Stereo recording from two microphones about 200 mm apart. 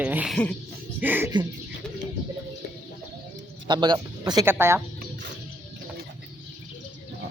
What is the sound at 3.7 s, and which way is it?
Speech, 20° right (ahead or behind).